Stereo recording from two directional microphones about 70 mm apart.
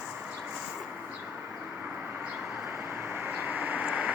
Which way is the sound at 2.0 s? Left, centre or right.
Right.